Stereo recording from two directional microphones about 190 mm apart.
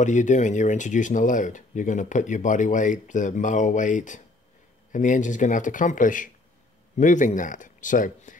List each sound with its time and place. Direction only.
0.0 s speech: 40° left (ahead or behind)